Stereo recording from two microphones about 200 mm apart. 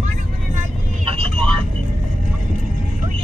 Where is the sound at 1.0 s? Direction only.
30° right (ahead or behind).